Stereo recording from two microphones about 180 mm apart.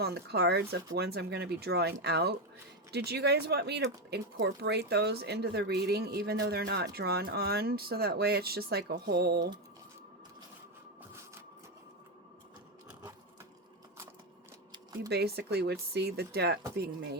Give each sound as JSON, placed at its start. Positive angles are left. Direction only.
{"t": 0.0, "sound": "speech", "side_deg": -65}
{"t": 15.1, "sound": "speech", "side_deg": -65}